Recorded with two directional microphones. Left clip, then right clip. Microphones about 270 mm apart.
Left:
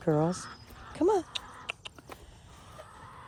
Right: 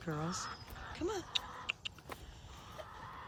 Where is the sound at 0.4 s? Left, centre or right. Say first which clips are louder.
Even; right.